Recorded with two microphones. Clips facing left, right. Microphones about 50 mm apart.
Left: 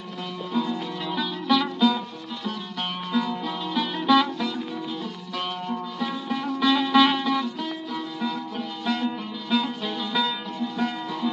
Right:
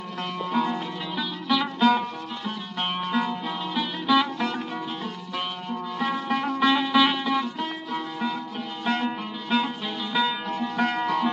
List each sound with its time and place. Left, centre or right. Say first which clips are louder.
0.2 s music: right 2 dB; right
1.1 s music: left 3 dB; centre
1.8 s music: right 2 dB; right
2.7 s music: right 2 dB; right
3.4 s music: left 1 dB; centre
4.4 s music: right 1 dB; right
5.3 s music: left 2 dB; centre
6.0 s music: right 5 dB; right
6.7 s music: left 2 dB; centre
7.6 s music: right 1 dB; right
10.5 s music: right 2 dB; right